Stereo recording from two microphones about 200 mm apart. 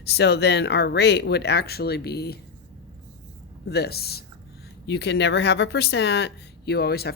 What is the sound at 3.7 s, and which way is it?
Speech, 55° left (ahead or behind).